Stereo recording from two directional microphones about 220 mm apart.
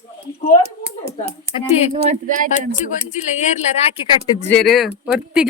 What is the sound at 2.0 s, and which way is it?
Speech, 40° right (ahead or behind).